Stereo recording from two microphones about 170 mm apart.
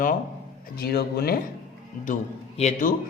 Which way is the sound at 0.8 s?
65° left (ahead or behind).